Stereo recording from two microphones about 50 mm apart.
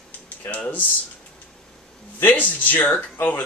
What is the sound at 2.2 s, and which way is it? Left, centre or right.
Speech, left.